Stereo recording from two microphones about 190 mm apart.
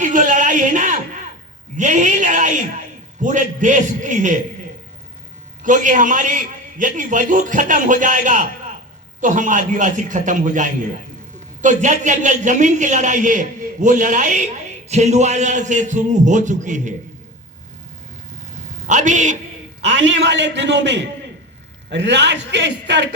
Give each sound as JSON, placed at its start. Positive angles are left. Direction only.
{"t": 0.0, "sound": "a man's voice", "side_deg": -40}
{"t": 5.6, "sound": "a man's voice", "side_deg": -40}
{"t": 18.5, "sound": "a sound", "side_deg": -40}
{"t": 19.9, "sound": "a man's voice", "side_deg": -70}